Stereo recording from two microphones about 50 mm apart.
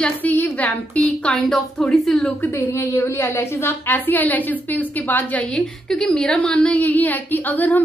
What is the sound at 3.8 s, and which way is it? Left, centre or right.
A woman's voice, left.